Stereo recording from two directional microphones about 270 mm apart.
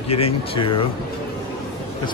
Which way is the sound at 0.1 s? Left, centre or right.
Centre.